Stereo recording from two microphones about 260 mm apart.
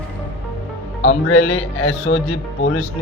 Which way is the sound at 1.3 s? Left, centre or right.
Left.